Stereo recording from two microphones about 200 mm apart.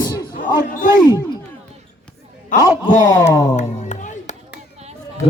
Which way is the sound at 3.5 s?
35° left (ahead or behind).